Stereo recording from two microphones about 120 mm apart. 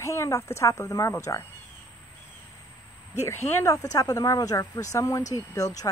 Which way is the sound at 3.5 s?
25° left (ahead or behind).